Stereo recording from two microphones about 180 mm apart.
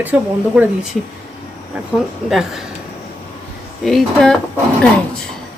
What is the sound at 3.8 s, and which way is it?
Speech, centre (ahead or behind).